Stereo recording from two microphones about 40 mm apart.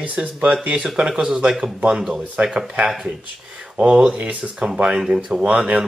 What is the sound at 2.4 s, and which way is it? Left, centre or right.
Speech, right.